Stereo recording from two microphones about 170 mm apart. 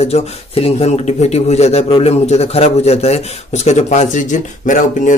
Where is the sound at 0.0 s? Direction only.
40° left (ahead or behind).